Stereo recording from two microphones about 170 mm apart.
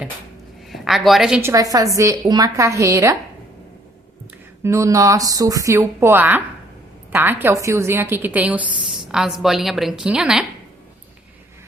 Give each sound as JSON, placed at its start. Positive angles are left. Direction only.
{"t": 0.7, "sound": "a woman's voice", "side_deg": 0}
{"t": 1.4, "sound": "a woman's voice", "side_deg": -15}
{"t": 4.6, "sound": "a woman's voice", "side_deg": -20}